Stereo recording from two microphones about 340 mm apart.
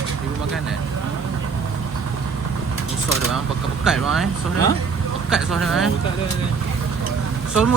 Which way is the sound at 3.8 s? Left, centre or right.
Centre.